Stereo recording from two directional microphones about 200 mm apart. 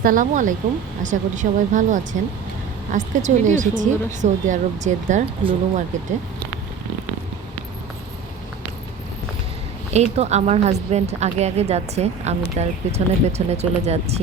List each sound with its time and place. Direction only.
0.0 s a woman's voice: 40° right (ahead or behind)
5.4 s speech: 25° right (ahead or behind)
9.9 s a woman's voice: 35° right (ahead or behind)